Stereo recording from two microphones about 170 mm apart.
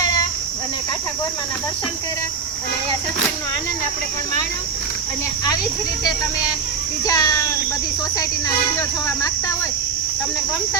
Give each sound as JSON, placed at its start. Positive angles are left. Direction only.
{"t": 7.0, "sound": "a child's voice", "side_deg": 20}